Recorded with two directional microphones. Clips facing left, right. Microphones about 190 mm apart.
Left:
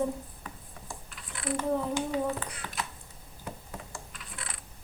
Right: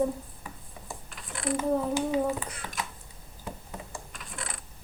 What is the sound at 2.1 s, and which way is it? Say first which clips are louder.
Speech: right 3 dB; 10° right (ahead or behind).